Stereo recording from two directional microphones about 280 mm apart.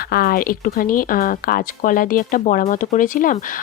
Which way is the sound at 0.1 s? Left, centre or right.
Left.